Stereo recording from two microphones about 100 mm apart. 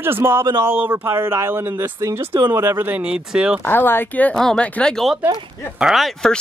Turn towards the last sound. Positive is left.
turn(degrees=5)  # may be behind; listen again after turning